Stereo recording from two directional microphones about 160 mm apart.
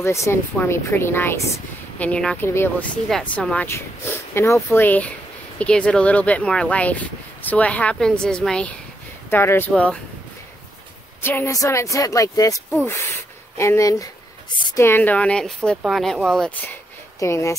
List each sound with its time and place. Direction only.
0.0 s speech: 15° left (ahead or behind)
3.1 s speech: 5° left (ahead or behind)
11.2 s speech: 15° left (ahead or behind)
17.2 s speech: 20° left (ahead or behind)